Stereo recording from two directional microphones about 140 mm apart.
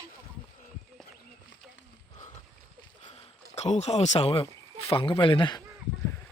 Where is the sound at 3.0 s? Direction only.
45° left (ahead or behind).